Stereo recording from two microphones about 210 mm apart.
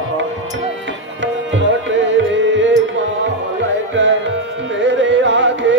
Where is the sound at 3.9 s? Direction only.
60° right (ahead or behind).